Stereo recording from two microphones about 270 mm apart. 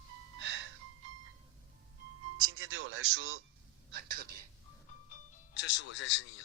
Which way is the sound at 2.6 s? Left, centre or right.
Right.